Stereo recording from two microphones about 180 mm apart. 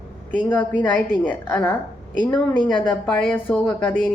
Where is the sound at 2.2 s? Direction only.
25° left (ahead or behind).